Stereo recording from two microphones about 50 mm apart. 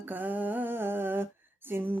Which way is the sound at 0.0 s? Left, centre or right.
Right.